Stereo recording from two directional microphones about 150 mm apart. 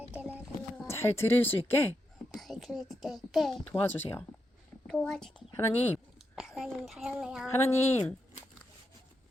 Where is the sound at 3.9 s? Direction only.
15° left (ahead or behind).